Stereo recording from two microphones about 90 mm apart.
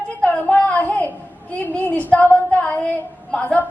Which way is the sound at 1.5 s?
20° left (ahead or behind).